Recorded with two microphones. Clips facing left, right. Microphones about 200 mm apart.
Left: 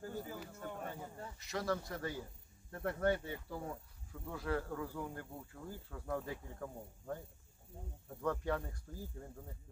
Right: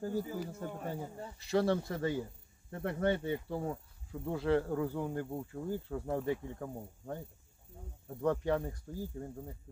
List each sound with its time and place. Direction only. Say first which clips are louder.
0.0 s speech: right 8 dB; 35° right (ahead or behind)
0.7 s speech: right 5 dB; 20° right (ahead or behind)
1.4 s speech: right 8 dB; 30° right (ahead or behind)
8.2 s speech: right 6 dB; 20° right (ahead or behind)